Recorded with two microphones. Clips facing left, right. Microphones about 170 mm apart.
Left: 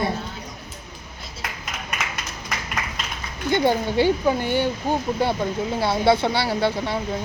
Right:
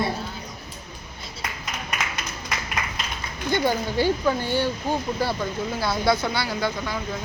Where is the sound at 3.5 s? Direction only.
20° left (ahead or behind).